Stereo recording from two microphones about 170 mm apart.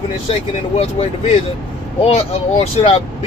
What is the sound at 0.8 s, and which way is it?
Speech, 35° left (ahead or behind).